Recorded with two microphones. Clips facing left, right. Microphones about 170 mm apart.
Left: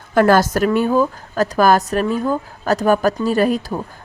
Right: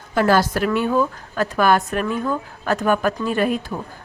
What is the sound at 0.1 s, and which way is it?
A woman's voice, 50° left (ahead or behind).